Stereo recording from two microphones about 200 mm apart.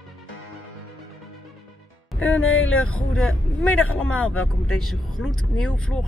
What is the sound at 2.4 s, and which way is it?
Speech, 85° left.